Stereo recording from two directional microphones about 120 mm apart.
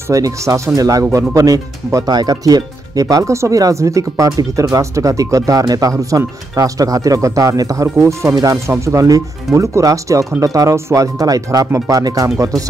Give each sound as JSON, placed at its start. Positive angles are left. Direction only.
{"t": 0.1, "sound": "speech", "side_deg": -30}